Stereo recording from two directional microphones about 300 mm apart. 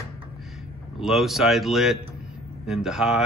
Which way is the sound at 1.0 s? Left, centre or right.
Centre.